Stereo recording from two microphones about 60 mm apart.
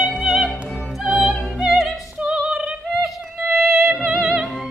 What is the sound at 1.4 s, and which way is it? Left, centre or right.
Opera, centre.